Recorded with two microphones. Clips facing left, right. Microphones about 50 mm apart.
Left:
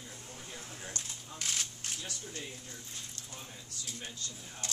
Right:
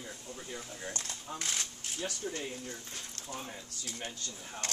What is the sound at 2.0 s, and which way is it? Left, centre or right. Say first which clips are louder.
Speech: right 10 dB; right.